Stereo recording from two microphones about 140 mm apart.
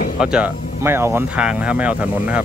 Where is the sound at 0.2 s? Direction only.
5° right (ahead or behind).